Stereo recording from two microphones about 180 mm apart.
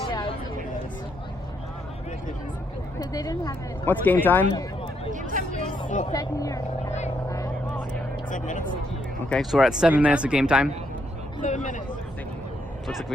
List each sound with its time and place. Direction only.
0.1 s a sound: 25° left (ahead or behind)
3.0 s speech: 20° left (ahead or behind)
4.5 s a sound: 30° left (ahead or behind)
5.1 s hubbub: 45° right (ahead or behind)
6.1 s speech: 20° left (ahead or behind)
7.3 s vehicle: 20° left (ahead or behind)
8.3 s speech: 45° left (ahead or behind)
9.3 s speech: centre (ahead or behind)
11.4 s speech: 45° left (ahead or behind)
12.9 s speech: centre (ahead or behind)